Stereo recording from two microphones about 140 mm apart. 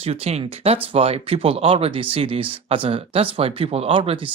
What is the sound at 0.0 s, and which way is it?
Speech, 45° right (ahead or behind).